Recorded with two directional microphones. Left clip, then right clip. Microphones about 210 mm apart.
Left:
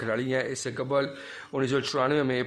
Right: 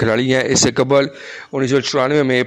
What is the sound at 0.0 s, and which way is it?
A man's voice, 45° right (ahead or behind).